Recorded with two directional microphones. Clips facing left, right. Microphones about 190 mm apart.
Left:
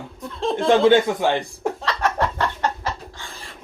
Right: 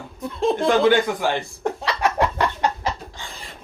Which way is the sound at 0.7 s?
25° left (ahead or behind).